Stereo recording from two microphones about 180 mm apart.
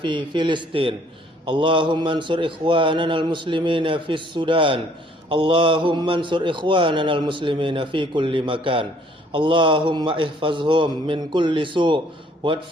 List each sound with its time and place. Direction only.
0.0 s a man's voice: 25° right (ahead or behind)